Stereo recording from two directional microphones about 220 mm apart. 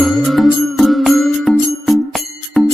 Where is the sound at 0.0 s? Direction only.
Centre (ahead or behind).